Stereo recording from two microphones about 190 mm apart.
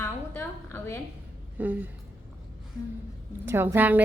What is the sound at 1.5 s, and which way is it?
Speech, 10° right (ahead or behind).